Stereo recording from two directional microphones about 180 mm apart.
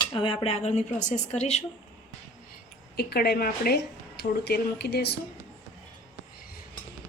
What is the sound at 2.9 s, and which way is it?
Speech, 60° left (ahead or behind).